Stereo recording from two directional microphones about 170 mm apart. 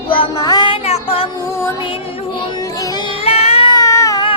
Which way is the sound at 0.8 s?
35° left (ahead or behind).